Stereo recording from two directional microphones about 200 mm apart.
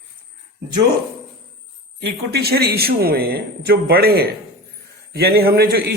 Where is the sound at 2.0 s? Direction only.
55° right (ahead or behind).